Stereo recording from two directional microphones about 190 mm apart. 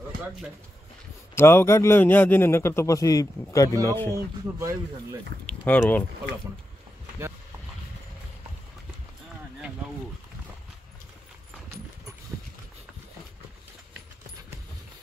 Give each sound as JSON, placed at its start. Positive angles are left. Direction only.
{"t": 1.3, "sound": "a man's voice", "side_deg": 15}
{"t": 4.1, "sound": "speech", "side_deg": -15}
{"t": 5.5, "sound": "speech", "side_deg": 5}